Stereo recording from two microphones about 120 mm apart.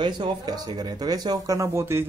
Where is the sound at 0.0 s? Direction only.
35° right (ahead or behind).